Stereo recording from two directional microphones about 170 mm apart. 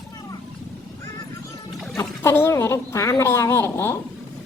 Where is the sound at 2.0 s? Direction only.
15° left (ahead or behind).